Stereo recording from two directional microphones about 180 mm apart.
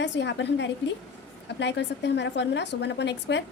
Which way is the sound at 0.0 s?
75° left (ahead or behind).